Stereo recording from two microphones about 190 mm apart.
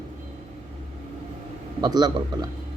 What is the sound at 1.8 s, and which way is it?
Speech, 20° right (ahead or behind).